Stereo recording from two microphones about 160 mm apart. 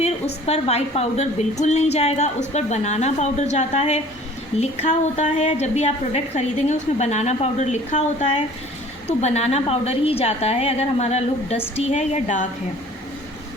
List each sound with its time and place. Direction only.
0.4 s a woman's voice: 40° left (ahead or behind)